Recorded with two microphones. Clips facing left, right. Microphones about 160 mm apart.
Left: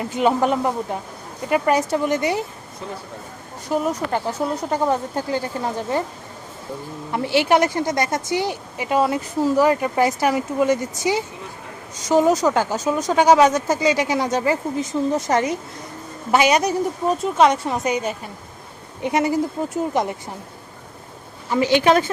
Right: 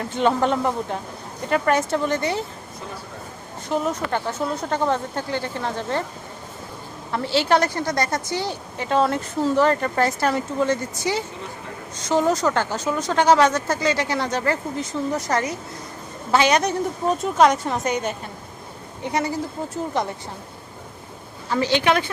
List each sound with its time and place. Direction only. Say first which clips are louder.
0.0 s speech: left 1 dB; 10° left (ahead or behind)
3.7 s speech: left 2 dB; 5° left (ahead or behind)
7.1 s speech: left 2 dB; 15° left (ahead or behind)
16.3 s speech: left 2 dB; 10° left (ahead or behind)
19.0 s speech: left 5 dB; 20° left (ahead or behind)
21.5 s speech: left 3 dB; 15° left (ahead or behind)
21.8 s speech: left 5 dB; 40° left (ahead or behind)